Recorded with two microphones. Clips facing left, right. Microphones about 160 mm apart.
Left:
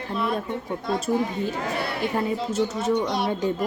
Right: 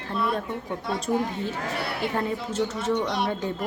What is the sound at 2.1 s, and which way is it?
A woman's voice, 10° left (ahead or behind).